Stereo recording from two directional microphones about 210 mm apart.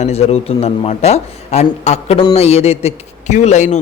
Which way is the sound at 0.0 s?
30° left (ahead or behind).